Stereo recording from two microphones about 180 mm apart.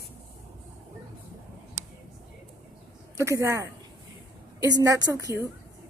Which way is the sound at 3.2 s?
15° right (ahead or behind).